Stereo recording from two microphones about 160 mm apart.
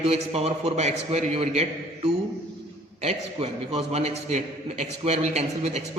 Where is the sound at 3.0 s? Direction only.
40° right (ahead or behind).